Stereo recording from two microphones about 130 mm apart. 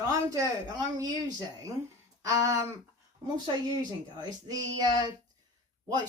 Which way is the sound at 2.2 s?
25° right (ahead or behind).